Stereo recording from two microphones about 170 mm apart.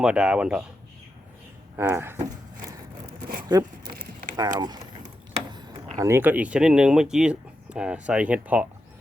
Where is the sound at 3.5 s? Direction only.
25° right (ahead or behind).